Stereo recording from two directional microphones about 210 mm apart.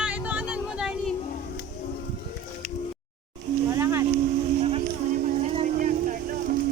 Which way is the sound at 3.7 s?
15° right (ahead or behind).